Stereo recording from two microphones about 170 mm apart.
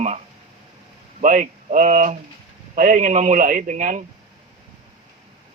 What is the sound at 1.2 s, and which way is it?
A man's voice, 50° right (ahead or behind).